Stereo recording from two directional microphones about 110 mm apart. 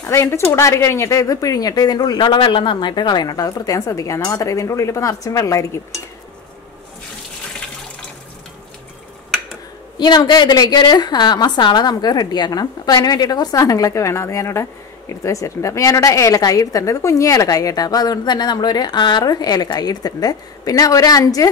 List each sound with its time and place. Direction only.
0.0 s a woman's voice: 25° left (ahead or behind)
9.9 s a woman's voice: 40° left (ahead or behind)